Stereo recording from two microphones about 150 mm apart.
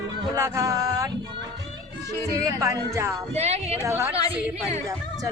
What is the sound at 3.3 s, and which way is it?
Speech, 45° right (ahead or behind).